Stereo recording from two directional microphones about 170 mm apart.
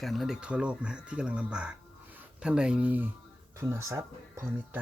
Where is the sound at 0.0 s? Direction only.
Centre (ahead or behind).